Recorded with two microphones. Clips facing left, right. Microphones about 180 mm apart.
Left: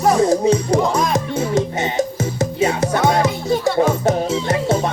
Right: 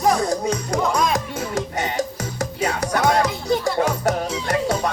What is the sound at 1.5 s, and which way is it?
Music, 20° left (ahead or behind).